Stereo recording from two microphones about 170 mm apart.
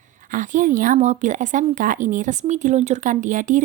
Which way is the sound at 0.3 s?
50° right (ahead or behind).